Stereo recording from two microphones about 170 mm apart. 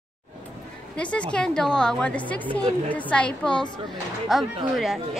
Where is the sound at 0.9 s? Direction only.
5° left (ahead or behind).